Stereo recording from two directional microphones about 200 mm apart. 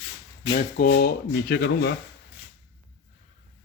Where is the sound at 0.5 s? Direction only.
45° left (ahead or behind).